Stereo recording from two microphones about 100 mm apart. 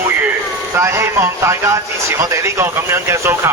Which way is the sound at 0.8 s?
25° right (ahead or behind).